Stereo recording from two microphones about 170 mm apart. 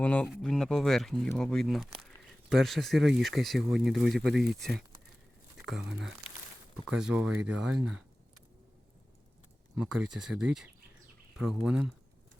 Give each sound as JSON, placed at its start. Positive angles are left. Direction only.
{"t": 0.0, "sound": "speech", "side_deg": 10}
{"t": 5.8, "sound": "speech", "side_deg": -90}
{"t": 6.8, "sound": "speech", "side_deg": -5}
{"t": 9.7, "sound": "speech", "side_deg": -5}